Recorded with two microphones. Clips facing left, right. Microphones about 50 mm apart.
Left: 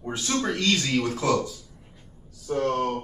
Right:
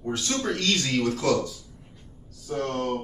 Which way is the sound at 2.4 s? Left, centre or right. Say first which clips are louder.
Left 3 dB; centre.